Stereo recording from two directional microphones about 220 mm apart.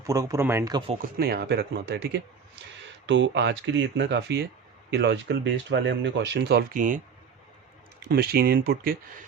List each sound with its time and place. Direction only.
0.0 s speech: 15° right (ahead or behind)
1.2 s speech: 45° right (ahead or behind)
8.0 s speech: 45° right (ahead or behind)